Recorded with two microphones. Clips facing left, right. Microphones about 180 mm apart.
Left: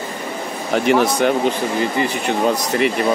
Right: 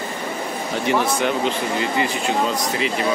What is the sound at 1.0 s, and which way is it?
Speech, 50° left (ahead or behind).